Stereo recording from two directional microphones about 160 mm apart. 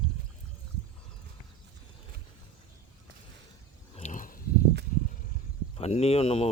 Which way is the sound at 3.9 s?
50° left (ahead or behind).